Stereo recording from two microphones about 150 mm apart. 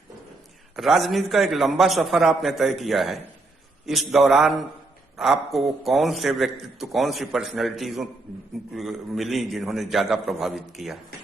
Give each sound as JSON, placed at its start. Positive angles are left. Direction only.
{"t": 0.8, "sound": "a man's voice", "side_deg": 0}